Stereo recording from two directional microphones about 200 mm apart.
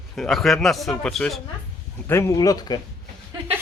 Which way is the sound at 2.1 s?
15° left (ahead or behind).